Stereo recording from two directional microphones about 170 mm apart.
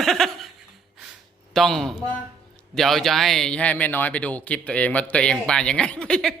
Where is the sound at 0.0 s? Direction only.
Centre (ahead or behind).